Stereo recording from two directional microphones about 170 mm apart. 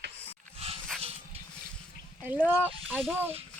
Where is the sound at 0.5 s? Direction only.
35° right (ahead or behind).